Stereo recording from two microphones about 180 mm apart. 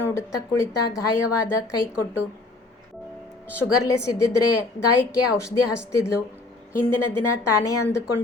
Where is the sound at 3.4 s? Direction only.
15° left (ahead or behind).